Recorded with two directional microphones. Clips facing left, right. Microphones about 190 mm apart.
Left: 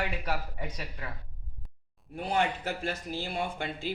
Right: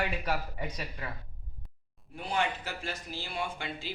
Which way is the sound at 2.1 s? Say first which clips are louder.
Left 3 dB; 55° left (ahead or behind).